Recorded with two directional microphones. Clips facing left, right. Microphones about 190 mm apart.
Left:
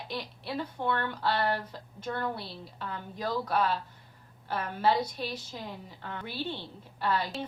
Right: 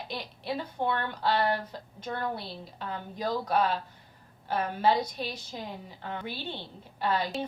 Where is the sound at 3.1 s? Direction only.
15° right (ahead or behind).